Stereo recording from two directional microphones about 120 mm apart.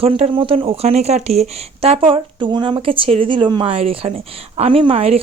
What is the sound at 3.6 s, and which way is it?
Speech, 55° right (ahead or behind).